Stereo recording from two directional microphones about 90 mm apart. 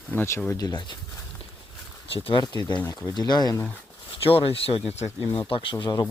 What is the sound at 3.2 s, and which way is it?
Speech, 50° left (ahead or behind).